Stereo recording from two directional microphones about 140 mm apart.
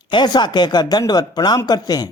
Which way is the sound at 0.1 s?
30° left (ahead or behind).